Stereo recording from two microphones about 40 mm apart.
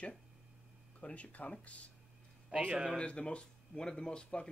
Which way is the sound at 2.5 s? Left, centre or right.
Right.